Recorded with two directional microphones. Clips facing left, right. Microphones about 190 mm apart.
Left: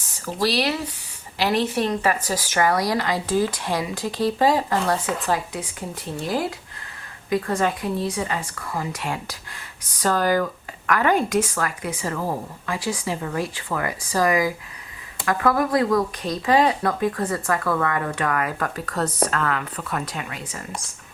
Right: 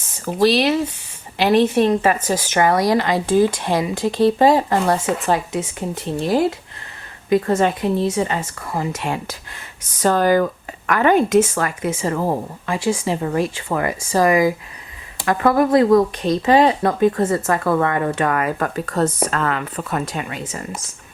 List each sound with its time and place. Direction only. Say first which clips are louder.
0.3 s speech: right 7 dB; 20° right (ahead or behind)